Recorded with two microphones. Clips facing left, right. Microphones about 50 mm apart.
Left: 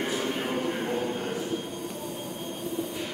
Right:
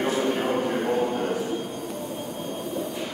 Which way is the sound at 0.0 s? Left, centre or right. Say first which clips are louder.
Right 5 dB; right.